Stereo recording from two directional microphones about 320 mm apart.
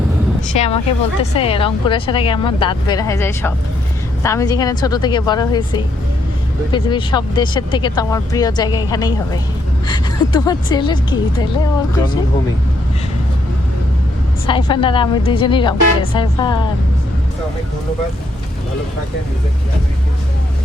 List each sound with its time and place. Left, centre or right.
0.5 s a woman's voice: centre
14.4 s speech: centre